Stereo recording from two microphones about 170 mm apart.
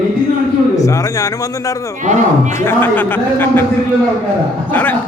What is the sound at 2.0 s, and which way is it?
Speech, 45° right (ahead or behind).